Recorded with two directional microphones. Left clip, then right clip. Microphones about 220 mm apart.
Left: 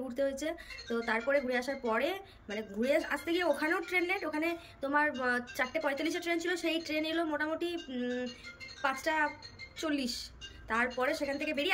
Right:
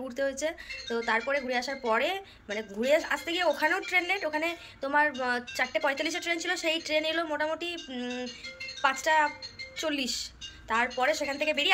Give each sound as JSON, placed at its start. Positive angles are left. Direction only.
{"t": 0.1, "sound": "speech", "side_deg": 10}